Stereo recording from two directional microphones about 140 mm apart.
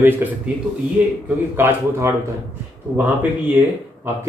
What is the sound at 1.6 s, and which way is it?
Speech, 15° right (ahead or behind).